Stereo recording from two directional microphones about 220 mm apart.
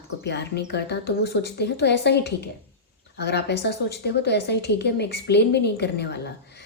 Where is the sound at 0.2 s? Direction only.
50° left (ahead or behind).